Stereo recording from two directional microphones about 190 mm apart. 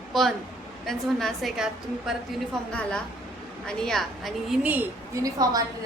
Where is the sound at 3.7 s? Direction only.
5° left (ahead or behind).